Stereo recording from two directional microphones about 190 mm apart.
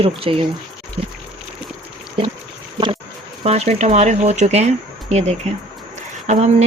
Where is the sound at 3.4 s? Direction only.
35° right (ahead or behind).